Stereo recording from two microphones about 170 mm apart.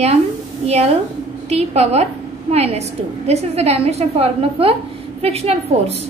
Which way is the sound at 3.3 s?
40° right (ahead or behind).